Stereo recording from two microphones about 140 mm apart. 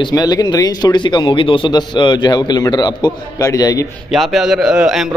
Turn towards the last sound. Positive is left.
turn(degrees=-5)  # may be behind; listen again after turning